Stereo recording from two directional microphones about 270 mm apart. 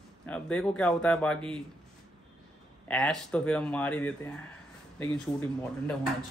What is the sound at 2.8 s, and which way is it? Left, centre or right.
Speech, centre.